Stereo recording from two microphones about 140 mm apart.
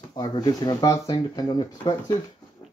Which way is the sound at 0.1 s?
30° left (ahead or behind).